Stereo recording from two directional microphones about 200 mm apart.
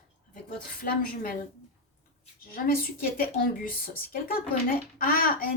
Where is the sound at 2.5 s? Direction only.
45° left (ahead or behind).